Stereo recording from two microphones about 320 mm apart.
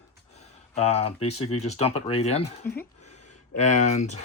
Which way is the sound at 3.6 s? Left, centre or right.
Left.